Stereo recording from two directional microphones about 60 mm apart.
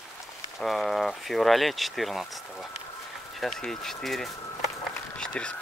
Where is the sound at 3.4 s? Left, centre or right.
Centre.